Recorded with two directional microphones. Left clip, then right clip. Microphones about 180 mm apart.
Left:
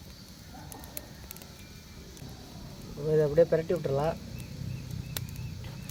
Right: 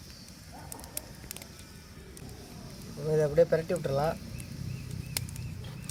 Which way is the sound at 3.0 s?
40° left (ahead or behind).